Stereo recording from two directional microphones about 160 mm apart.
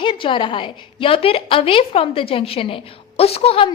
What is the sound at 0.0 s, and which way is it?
A woman's voice, 30° left (ahead or behind).